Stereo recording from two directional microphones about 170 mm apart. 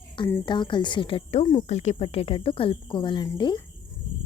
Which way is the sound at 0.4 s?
25° left (ahead or behind).